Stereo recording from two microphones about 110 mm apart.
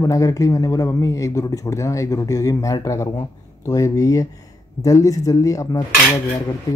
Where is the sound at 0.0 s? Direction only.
30° left (ahead or behind).